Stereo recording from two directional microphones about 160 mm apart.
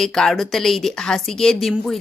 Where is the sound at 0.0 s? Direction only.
Centre (ahead or behind).